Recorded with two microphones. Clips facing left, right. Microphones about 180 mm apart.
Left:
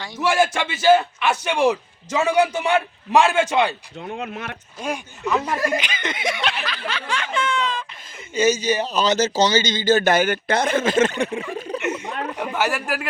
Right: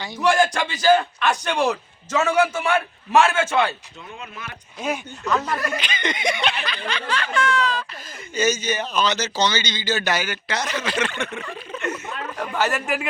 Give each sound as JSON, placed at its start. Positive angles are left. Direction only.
{"t": 0.0, "sound": "a man's voice", "side_deg": 5}
{"t": 4.1, "sound": "speech", "side_deg": 70}
{"t": 5.2, "sound": "a man's voice", "side_deg": 10}
{"t": 5.7, "sound": "snicker", "side_deg": 10}
{"t": 7.2, "sound": "a man's voice", "side_deg": 25}
{"t": 11.8, "sound": "a sound", "side_deg": 20}
{"t": 12.2, "sound": "a man's voice", "side_deg": 15}